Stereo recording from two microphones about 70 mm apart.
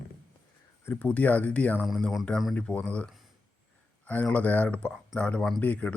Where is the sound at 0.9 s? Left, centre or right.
Left.